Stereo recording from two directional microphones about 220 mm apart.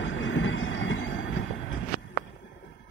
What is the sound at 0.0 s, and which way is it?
Train, 60° left (ahead or behind).